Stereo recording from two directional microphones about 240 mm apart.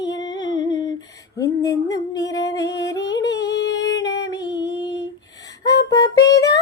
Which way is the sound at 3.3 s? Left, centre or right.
Left.